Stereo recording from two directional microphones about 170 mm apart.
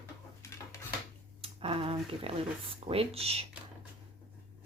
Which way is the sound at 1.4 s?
35° right (ahead or behind).